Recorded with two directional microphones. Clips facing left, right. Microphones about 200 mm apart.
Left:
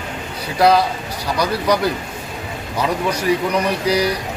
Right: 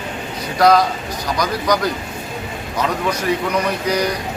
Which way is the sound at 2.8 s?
10° left (ahead or behind).